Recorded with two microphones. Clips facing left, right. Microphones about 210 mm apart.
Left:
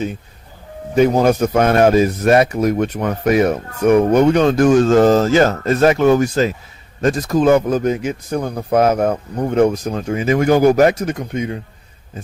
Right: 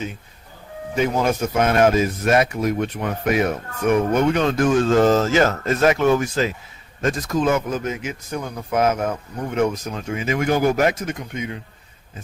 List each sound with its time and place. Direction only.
0.9 s speech: 40° left (ahead or behind)